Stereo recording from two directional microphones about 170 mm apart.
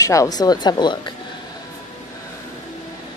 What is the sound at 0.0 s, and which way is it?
A woman's voice, 20° left (ahead or behind).